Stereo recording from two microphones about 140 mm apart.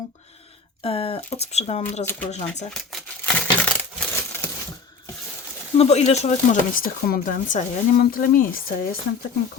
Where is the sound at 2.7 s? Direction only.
5° left (ahead or behind).